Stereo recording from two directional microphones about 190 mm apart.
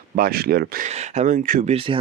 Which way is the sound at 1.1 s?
40° right (ahead or behind).